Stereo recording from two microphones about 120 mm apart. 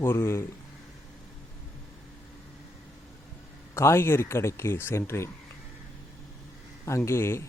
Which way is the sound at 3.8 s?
20° left (ahead or behind).